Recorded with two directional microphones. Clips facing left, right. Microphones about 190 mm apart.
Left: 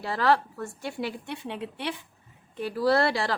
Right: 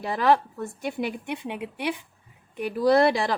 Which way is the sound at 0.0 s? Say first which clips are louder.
Right 2 dB; 15° right (ahead or behind).